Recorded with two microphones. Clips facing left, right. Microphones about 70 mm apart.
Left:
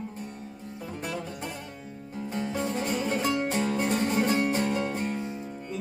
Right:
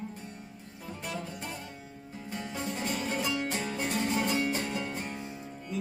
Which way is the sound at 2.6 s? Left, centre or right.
Left.